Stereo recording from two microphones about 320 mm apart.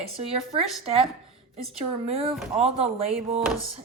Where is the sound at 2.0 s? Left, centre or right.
Centre.